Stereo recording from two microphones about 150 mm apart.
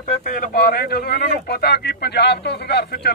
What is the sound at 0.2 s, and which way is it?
Speech, 65° left (ahead or behind).